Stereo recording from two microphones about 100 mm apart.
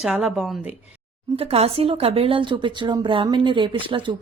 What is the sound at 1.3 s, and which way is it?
Speech, 80° right.